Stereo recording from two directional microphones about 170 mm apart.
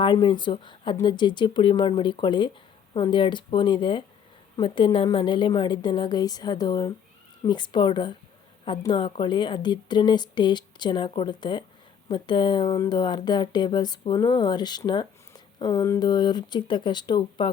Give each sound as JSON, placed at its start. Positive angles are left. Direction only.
{"t": 0.0, "sound": "speech", "side_deg": 30}